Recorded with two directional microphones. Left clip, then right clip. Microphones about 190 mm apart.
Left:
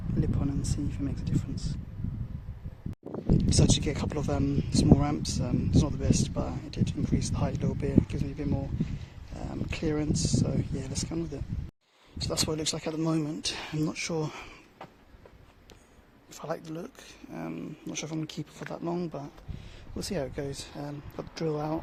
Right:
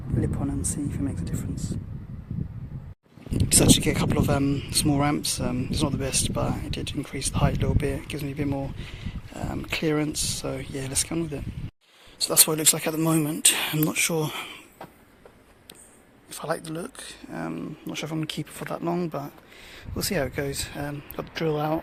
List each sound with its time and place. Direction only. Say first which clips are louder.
0.2 s speech: right 4 dB; 5° right (ahead or behind)
3.3 s speech: right 7 dB; centre (ahead or behind)
16.3 s speech: right 6 dB; 5° right (ahead or behind)